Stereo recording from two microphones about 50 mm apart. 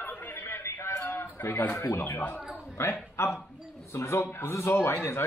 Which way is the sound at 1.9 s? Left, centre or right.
Left.